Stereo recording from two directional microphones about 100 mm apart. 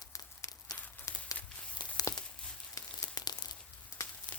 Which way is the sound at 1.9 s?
40° left (ahead or behind).